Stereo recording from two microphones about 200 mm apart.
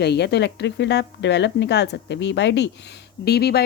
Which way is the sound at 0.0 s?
55° left (ahead or behind).